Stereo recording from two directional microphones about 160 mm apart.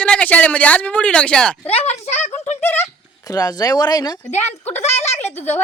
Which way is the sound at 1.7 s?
40° left (ahead or behind).